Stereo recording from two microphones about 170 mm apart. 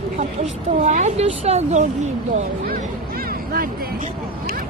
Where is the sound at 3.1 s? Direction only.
60° right (ahead or behind).